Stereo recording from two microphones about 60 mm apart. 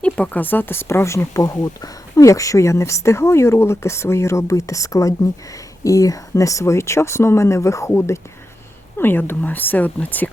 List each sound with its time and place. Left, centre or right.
0.0 s speech: left
1.6 s speech: left
9.0 s speech: left